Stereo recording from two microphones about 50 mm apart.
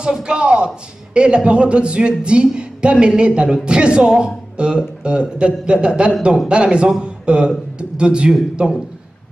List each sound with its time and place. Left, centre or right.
0.0 s a man's voice: centre